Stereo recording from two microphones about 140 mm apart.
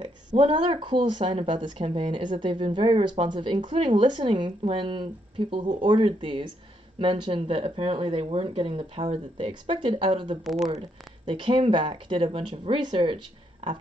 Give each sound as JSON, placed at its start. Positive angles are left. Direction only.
{"t": 0.4, "sound": "speech", "side_deg": -40}